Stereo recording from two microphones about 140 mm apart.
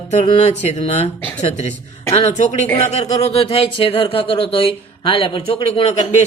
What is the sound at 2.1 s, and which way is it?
Speech, 50° left (ahead or behind).